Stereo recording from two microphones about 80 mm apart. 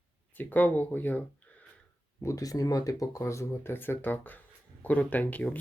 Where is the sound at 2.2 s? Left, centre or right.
Left.